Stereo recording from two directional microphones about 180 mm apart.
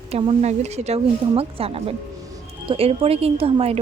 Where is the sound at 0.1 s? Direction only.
35° right (ahead or behind).